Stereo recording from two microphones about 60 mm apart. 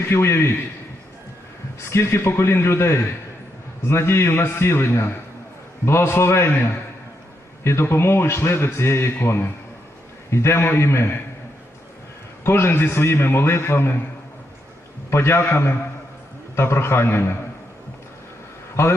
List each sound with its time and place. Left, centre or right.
0.1 s a man's voice: left
1.9 s a man's voice: left
7.6 s a man's voice: left
12.5 s a man's voice: left
15.1 s a man's voice: left